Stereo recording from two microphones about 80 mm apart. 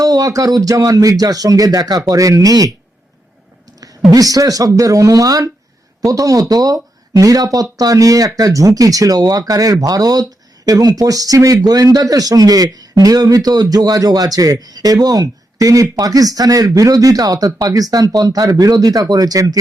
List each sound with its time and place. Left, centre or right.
0.0 s speech: right
4.1 s speech: right